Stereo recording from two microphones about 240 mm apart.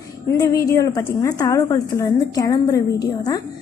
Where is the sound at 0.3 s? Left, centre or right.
Centre.